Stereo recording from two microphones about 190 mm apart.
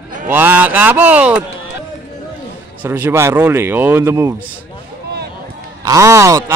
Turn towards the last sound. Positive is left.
turn(degrees=-15)  # may be behind; listen again after turning